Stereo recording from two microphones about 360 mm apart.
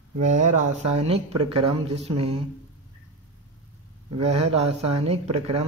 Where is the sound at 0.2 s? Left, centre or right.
Centre.